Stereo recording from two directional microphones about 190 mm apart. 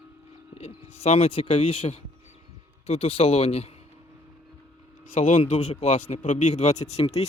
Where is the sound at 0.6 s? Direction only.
35° left (ahead or behind).